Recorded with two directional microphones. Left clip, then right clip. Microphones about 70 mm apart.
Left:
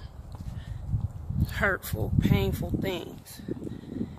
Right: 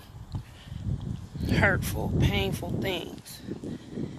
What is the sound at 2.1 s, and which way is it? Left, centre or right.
Speech, centre.